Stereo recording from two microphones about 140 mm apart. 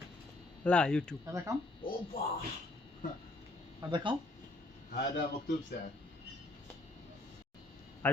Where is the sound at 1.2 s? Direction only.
20° right (ahead or behind).